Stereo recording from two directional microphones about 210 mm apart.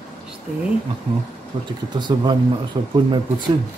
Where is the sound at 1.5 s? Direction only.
25° right (ahead or behind).